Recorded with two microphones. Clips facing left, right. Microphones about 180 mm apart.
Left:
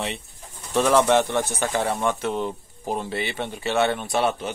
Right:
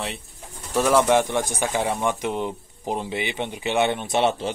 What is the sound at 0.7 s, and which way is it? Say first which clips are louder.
Speech: even; 10° right (ahead or behind).